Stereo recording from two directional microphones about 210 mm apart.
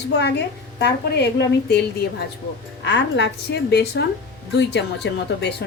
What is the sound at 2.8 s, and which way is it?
A woman's voice, 55° left (ahead or behind).